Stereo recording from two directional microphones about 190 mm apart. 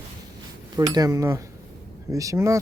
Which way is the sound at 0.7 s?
20° right (ahead or behind).